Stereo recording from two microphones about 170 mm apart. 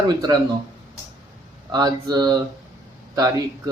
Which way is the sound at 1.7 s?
25° right (ahead or behind).